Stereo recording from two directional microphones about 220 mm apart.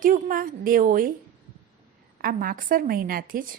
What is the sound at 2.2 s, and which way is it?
A woman's voice, 40° right (ahead or behind).